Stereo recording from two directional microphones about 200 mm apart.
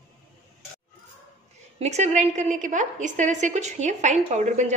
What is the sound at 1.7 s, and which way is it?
A woman's voice, 35° right (ahead or behind).